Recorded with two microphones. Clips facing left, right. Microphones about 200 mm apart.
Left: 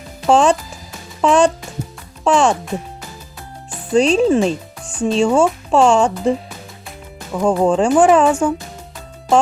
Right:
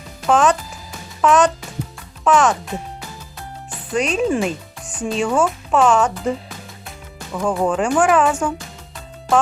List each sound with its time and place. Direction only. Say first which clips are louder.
0.3 s a child's voice: left 3 dB; 30° left (ahead or behind)
3.9 s speech: left 6 dB; 30° left (ahead or behind)
7.3 s speech: left 4 dB; 25° left (ahead or behind)